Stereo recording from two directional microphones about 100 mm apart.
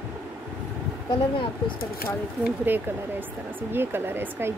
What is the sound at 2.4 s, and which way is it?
Speech, 20° right (ahead or behind).